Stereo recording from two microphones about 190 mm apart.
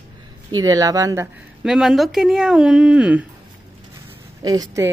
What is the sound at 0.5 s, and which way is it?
A woman's voice, 20° right (ahead or behind).